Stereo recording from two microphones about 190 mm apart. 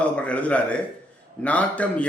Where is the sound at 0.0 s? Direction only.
5° left (ahead or behind).